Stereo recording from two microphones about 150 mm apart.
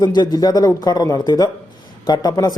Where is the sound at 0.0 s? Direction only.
30° left (ahead or behind).